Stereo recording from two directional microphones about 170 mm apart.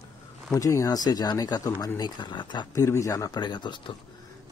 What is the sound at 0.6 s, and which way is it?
Speech, 20° left (ahead or behind).